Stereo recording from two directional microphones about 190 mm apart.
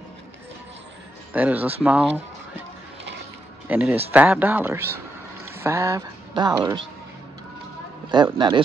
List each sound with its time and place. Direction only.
1.3 s speech: 10° right (ahead or behind)
3.6 s speech: 10° right (ahead or behind)
8.4 s speech: 25° right (ahead or behind)